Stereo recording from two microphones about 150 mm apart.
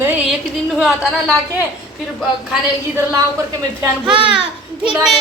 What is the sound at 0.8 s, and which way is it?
Speech, 5° right (ahead or behind).